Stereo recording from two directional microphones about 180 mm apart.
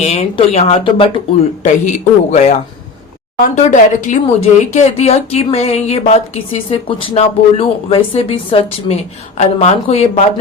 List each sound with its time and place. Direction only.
0.0 s speech: 35° left (ahead or behind)